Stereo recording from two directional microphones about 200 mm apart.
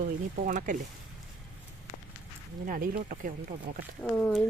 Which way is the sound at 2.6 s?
45° right (ahead or behind).